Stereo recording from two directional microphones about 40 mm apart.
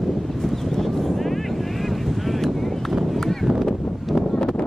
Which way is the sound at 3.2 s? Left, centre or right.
Centre.